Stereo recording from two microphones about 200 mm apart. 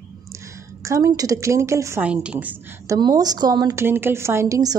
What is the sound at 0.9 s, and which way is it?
A woman's voice, 15° right (ahead or behind).